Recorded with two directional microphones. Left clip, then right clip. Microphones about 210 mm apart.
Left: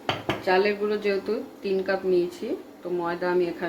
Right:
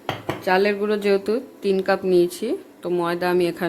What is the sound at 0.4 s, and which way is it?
Speech, 55° right (ahead or behind).